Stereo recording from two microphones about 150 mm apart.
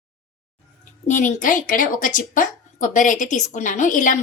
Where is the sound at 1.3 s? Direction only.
60° left (ahead or behind).